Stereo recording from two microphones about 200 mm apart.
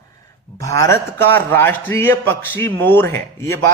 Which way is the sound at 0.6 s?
15° left (ahead or behind).